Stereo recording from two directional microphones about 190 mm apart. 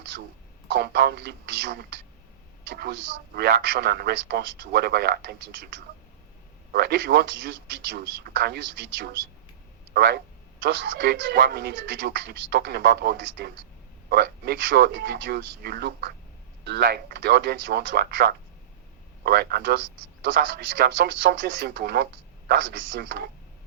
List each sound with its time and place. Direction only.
0.7 s a man's voice: 55° right (ahead or behind)
10.6 s a man's voice: 70° right (ahead or behind)